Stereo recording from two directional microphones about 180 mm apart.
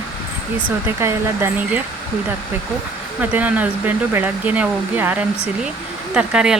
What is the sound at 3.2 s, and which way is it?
Speech, 10° right (ahead or behind).